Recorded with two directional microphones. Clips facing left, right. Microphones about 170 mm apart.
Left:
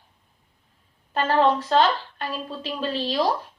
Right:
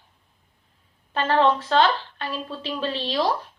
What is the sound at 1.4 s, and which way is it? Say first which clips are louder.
A woman's voice: even; 40° left (ahead or behind).